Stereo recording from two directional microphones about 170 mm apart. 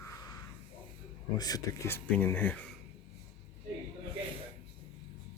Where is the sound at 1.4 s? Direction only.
20° left (ahead or behind).